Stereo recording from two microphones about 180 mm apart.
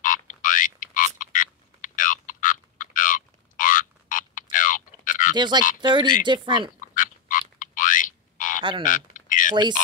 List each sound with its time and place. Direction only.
0.0 s frog: 45° left (ahead or behind)
5.3 s speech: 25° right (ahead or behind)
6.8 s frog: 45° left (ahead or behind)
8.8 s a sound: 45° left (ahead or behind)